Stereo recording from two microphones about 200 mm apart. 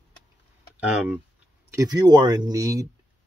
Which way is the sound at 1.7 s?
20° right (ahead or behind).